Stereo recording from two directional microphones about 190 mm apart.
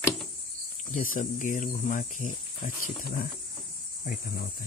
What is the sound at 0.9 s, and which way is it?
Speech, 40° left (ahead or behind).